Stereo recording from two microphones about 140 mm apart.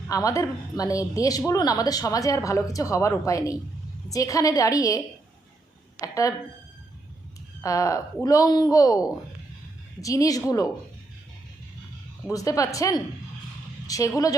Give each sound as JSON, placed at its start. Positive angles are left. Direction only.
{"t": 0.1, "sound": "a woman's voice", "side_deg": 25}
{"t": 6.0, "sound": "a woman's voice", "side_deg": 25}
{"t": 7.6, "sound": "a woman's voice", "side_deg": 25}
{"t": 12.3, "sound": "a woman's voice", "side_deg": 25}